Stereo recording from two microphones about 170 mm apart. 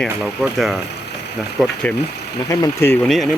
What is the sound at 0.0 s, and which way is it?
Speech, centre (ahead or behind).